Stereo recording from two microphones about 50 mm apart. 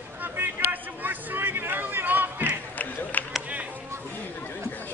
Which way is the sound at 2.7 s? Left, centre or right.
Left.